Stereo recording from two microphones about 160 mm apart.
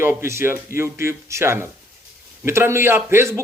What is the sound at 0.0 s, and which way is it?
A man's voice, 15° right (ahead or behind).